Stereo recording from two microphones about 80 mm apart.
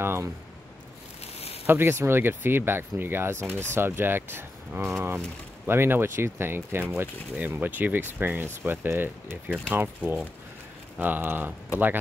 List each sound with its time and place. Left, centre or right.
0.0 s speech: right
1.7 s speech: right